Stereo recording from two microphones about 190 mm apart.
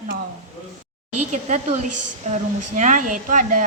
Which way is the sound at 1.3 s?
40° right (ahead or behind).